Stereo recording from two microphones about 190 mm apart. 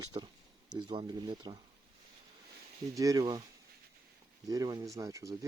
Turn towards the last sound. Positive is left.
turn(degrees=-15)  # may be behind; listen again after turning